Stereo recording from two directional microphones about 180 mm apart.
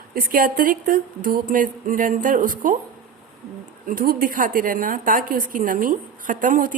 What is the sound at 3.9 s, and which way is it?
A woman's voice, 50° right (ahead or behind).